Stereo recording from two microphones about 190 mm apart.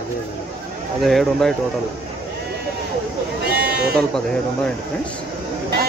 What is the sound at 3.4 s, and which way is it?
Sheep, 55° right (ahead or behind).